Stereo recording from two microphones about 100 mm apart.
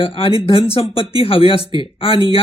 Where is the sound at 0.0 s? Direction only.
65° left (ahead or behind).